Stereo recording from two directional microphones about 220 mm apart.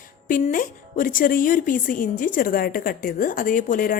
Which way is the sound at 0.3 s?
40° left (ahead or behind).